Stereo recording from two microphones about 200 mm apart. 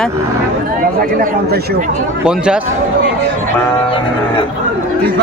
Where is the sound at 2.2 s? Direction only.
5° right (ahead or behind).